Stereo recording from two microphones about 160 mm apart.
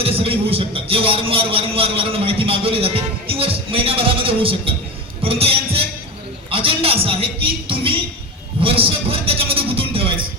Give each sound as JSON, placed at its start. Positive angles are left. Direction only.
{"t": 0.0, "sound": "a man's voice", "side_deg": -35}
{"t": 8.6, "sound": "a man's voice", "side_deg": -35}